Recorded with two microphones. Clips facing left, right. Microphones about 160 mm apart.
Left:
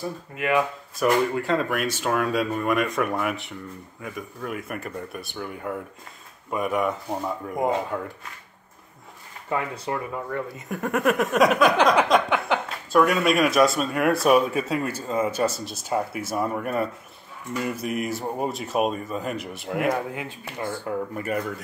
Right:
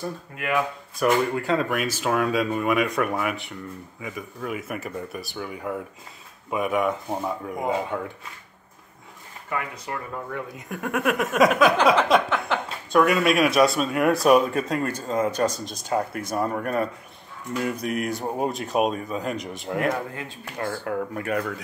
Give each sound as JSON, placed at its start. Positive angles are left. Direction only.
{"t": 0.0, "sound": "speech", "side_deg": 0}
{"t": 9.5, "sound": "speech", "side_deg": 25}
{"t": 10.1, "sound": "speech", "side_deg": 0}